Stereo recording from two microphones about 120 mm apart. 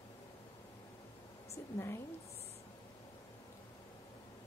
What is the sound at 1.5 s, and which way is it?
Speech, 20° left (ahead or behind).